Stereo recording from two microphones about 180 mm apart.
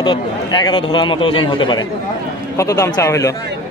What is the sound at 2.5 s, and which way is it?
Speech, 15° left (ahead or behind).